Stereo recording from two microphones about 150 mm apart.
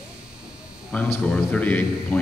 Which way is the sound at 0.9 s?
10° left (ahead or behind).